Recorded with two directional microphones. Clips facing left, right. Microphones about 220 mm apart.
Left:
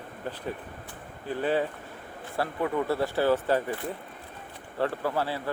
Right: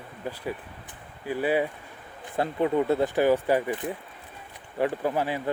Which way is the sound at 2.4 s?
20° right (ahead or behind).